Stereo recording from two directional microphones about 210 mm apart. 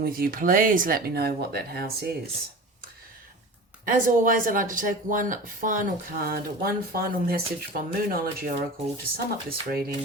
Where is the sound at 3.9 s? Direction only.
40° right (ahead or behind).